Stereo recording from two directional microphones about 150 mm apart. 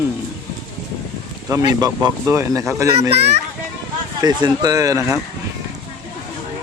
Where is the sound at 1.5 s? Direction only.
25° right (ahead or behind).